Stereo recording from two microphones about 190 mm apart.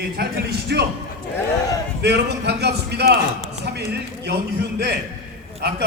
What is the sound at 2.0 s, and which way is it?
A man's voice, 60° right (ahead or behind).